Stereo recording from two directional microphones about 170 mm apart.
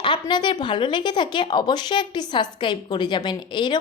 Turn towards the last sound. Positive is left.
turn(degrees=25)  # may be behind; listen again after turning